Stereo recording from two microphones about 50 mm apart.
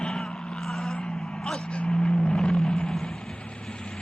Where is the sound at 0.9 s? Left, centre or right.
Centre.